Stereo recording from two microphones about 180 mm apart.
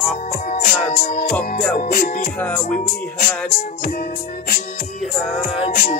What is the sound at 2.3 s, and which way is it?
Music, 10° left (ahead or behind).